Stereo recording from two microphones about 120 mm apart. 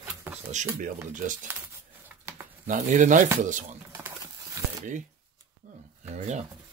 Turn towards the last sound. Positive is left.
turn(degrees=-75)  # may be behind; listen again after turning